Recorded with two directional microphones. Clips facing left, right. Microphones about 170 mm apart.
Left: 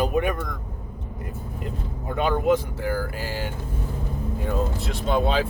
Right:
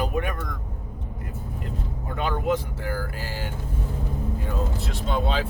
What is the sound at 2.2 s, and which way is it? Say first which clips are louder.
Speech: left 4 dB; 15° left (ahead or behind).